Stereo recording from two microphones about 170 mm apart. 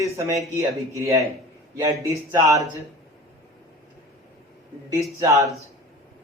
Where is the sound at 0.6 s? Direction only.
15° right (ahead or behind).